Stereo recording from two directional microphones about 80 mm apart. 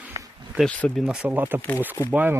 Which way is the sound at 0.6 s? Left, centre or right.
Centre.